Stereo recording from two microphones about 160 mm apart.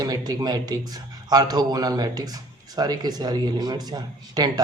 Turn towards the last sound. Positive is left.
turn(degrees=-25)  # may be behind; listen again after turning